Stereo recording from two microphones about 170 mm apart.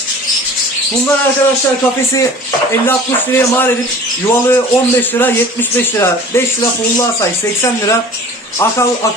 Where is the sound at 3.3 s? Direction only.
10° left (ahead or behind).